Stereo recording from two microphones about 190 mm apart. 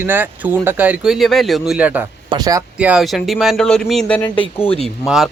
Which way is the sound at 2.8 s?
5° right (ahead or behind).